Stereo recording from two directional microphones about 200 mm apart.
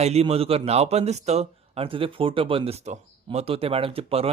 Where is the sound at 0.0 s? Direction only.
30° right (ahead or behind).